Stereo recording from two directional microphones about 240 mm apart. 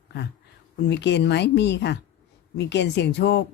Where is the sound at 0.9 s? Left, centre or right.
Left.